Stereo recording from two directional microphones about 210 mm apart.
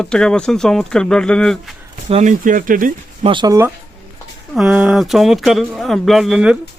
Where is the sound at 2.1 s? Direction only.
35° right (ahead or behind).